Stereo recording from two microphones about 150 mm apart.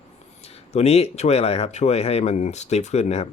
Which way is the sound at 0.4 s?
45° left (ahead or behind).